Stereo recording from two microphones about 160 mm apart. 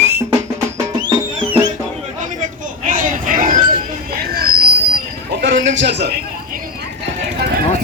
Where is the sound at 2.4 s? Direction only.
55° right (ahead or behind).